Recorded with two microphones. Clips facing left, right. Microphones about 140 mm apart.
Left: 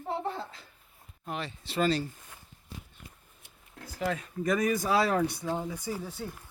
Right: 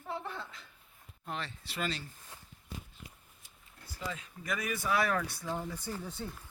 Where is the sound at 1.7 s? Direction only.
35° left (ahead or behind).